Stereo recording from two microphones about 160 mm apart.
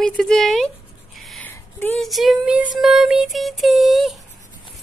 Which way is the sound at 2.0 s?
Centre (ahead or behind).